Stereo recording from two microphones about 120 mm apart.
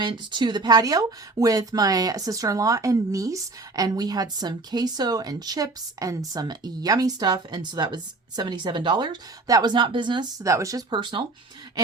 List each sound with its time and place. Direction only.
0.0 s speech: 40° right (ahead or behind)